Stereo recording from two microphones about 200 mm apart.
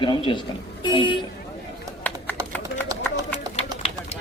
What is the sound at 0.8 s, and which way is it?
Vehicle, 25° left (ahead or behind).